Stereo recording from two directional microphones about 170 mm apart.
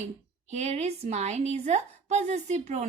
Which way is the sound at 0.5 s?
40° right (ahead or behind).